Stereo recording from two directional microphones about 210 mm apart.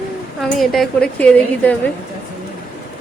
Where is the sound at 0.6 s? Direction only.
Centre (ahead or behind).